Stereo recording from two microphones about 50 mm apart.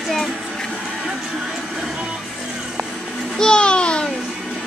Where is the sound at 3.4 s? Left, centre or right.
Centre.